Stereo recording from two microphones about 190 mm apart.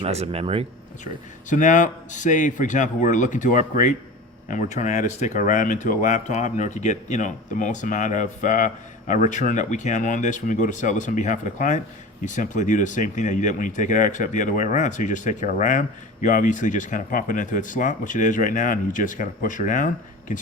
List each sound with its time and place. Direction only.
0.0 s speech: 30° right (ahead or behind)
1.0 s speech: 40° left (ahead or behind)